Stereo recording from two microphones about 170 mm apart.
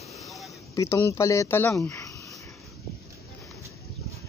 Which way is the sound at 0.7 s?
15° left (ahead or behind).